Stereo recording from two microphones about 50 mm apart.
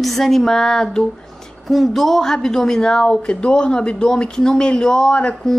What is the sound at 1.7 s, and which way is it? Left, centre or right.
A woman's voice, centre.